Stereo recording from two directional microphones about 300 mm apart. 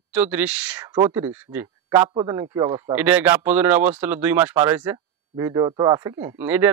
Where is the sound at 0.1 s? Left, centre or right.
Centre.